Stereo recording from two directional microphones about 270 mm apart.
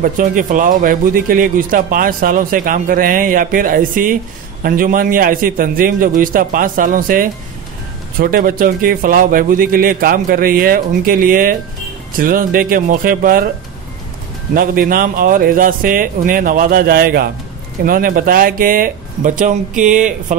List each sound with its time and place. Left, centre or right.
0.0 s a man's voice: right
14.5 s a man's voice: right